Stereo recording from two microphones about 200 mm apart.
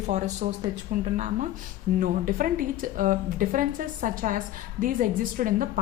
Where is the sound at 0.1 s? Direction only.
35° right (ahead or behind).